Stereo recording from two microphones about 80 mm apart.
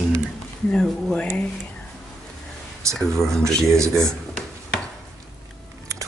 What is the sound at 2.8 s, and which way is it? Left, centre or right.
Speech, right.